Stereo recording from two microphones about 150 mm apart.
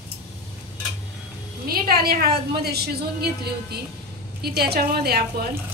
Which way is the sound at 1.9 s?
90° right.